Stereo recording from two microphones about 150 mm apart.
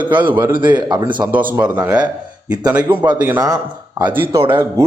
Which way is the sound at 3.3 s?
25° right (ahead or behind).